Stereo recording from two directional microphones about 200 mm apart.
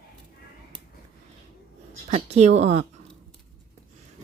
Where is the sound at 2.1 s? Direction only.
30° right (ahead or behind).